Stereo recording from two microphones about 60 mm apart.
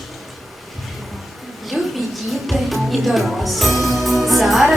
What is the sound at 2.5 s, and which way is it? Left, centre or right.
Speech, centre.